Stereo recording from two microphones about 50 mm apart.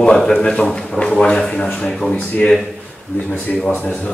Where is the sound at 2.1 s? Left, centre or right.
Left.